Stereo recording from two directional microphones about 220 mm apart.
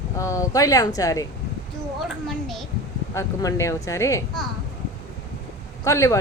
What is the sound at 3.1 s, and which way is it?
Speech, 15° left (ahead or behind).